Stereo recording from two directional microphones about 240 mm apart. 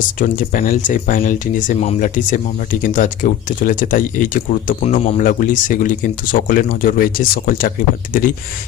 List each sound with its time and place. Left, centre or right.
0.2 s speech: left